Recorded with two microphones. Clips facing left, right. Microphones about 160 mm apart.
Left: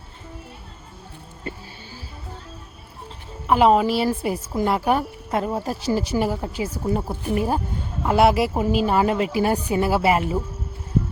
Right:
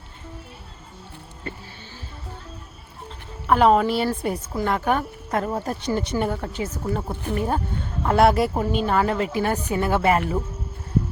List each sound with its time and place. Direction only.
3.4 s a woman's voice: 5° left (ahead or behind)